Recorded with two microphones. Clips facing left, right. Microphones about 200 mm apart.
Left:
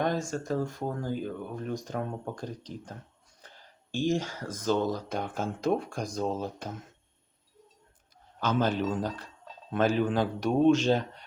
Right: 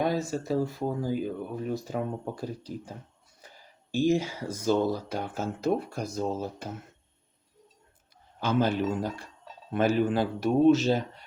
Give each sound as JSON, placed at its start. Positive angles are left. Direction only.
{"t": 0.0, "sound": "speech", "side_deg": -5}
{"t": 8.4, "sound": "speech", "side_deg": -10}